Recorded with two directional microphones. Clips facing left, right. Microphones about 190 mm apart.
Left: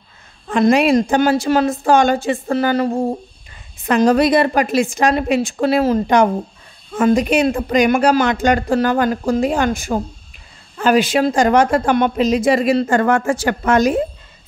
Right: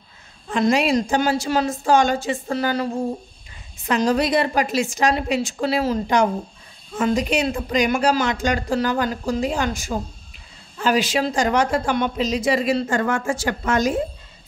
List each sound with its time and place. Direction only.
0.5 s a woman's voice: 55° left (ahead or behind)